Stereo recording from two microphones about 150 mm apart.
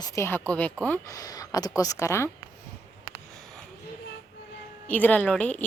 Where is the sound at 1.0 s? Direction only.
25° left (ahead or behind).